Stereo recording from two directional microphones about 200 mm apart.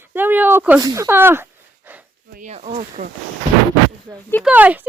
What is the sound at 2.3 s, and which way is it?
Speech, 35° right (ahead or behind).